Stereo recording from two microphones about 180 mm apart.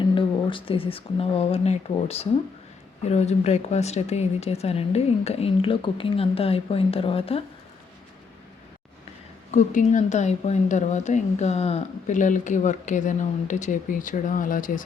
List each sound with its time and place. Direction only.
0.1 s a woman's voice: 30° left (ahead or behind)
9.5 s a woman's voice: 45° left (ahead or behind)